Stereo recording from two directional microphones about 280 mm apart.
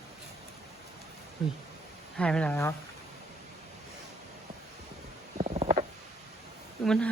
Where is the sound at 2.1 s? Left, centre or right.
Centre.